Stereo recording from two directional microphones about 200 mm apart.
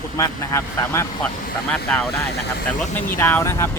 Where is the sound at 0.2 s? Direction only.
15° left (ahead or behind).